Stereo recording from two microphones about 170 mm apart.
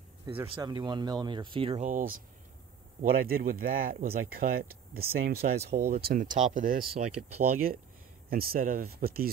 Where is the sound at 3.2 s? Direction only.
60° right (ahead or behind).